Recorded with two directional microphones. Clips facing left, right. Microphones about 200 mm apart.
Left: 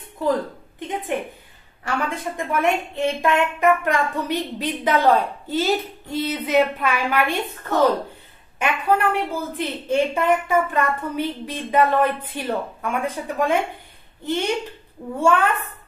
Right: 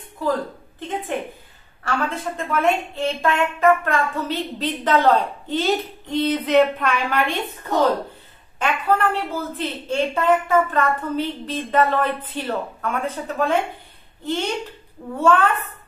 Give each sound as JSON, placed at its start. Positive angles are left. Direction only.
{"t": 0.7, "sound": "a woman's voice", "side_deg": 15}
{"t": 8.5, "sound": "a woman's voice", "side_deg": 10}
{"t": 15.1, "sound": "a woman's voice", "side_deg": 10}